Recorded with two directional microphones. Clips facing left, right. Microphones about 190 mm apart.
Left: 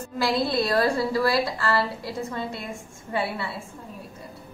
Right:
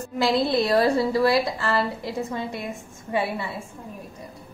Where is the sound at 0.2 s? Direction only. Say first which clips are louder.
Right 3 dB; 20° right (ahead or behind).